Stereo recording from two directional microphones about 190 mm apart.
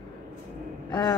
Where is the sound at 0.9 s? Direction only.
20° left (ahead or behind).